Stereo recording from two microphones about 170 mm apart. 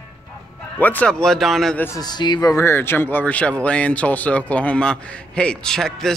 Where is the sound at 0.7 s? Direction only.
10° left (ahead or behind).